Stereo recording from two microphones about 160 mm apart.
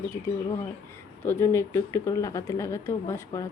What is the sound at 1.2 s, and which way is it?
Speech, 15° left (ahead or behind).